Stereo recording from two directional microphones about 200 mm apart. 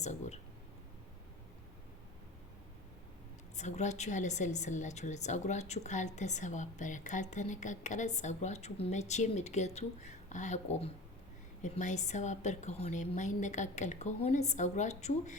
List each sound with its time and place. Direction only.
0.0 s a woman's voice: 35° left (ahead or behind)
3.6 s a woman's voice: 35° left (ahead or behind)